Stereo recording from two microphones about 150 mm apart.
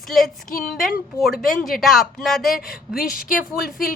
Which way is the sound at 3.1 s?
70° left (ahead or behind).